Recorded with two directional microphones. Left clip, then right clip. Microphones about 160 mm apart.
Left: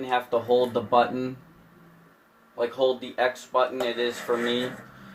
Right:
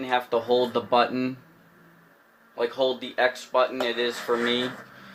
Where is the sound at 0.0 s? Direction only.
65° right (ahead or behind).